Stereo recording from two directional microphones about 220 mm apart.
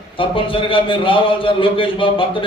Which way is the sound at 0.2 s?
25° left (ahead or behind).